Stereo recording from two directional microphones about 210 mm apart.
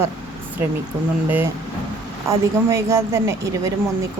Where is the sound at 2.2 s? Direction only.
15° right (ahead or behind).